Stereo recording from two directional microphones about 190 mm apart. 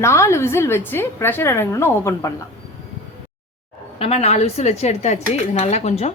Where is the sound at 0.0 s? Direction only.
15° left (ahead or behind).